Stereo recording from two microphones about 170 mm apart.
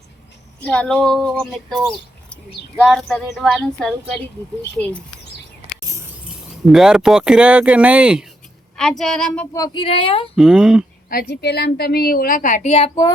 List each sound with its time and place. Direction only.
0.6 s speech: 5° left (ahead or behind)
2.8 s speech: centre (ahead or behind)
6.7 s speech: 5° right (ahead or behind)
9.6 s speech: 25° left (ahead or behind)
10.3 s speech: 5° right (ahead or behind)
11.1 s a woman's voice: 65° left (ahead or behind); by 13.1 s 35° left (ahead or behind)